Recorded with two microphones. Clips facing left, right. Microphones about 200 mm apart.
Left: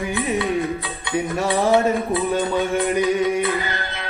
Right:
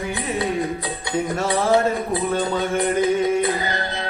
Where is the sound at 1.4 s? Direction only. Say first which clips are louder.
Left 2 dB; 15° left (ahead or behind).